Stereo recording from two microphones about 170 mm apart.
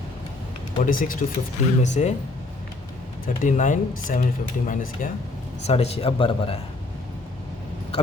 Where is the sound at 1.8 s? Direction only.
40° left (ahead or behind).